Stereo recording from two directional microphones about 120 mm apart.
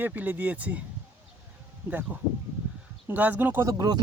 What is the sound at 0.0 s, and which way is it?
Speech, 15° right (ahead or behind).